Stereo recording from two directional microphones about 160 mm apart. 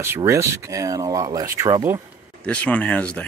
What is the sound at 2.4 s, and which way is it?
Speech, 5° left (ahead or behind).